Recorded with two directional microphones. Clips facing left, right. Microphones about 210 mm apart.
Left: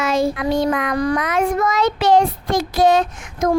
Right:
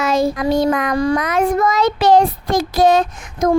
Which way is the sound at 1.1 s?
40° right (ahead or behind).